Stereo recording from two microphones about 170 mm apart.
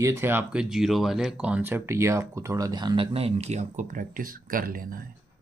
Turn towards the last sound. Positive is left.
turn(degrees=-55)  # may be behind; listen again after turning